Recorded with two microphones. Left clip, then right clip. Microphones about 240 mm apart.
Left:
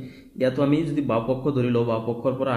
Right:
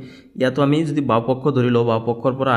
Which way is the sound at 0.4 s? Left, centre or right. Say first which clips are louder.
Right 4 dB; right.